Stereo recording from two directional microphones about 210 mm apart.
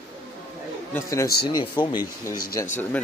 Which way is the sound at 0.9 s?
15° left (ahead or behind).